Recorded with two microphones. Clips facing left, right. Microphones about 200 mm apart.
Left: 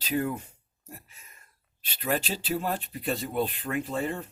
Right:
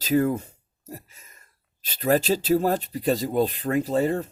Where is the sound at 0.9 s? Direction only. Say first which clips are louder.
Right 8 dB; 40° right (ahead or behind).